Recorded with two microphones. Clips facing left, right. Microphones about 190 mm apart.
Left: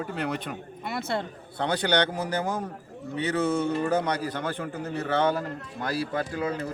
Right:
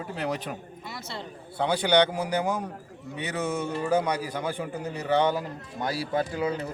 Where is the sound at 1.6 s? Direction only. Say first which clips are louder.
Right 3 dB; 10° right (ahead or behind).